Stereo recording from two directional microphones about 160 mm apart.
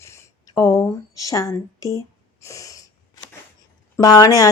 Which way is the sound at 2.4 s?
20° left (ahead or behind).